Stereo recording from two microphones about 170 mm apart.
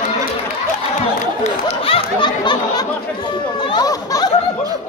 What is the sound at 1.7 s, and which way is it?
Chatter, 35° left (ahead or behind).